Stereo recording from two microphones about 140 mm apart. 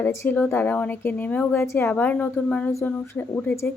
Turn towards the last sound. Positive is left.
turn(degrees=15)  # may be behind; listen again after turning